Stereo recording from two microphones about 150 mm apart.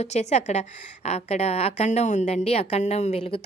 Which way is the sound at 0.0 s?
50° left (ahead or behind).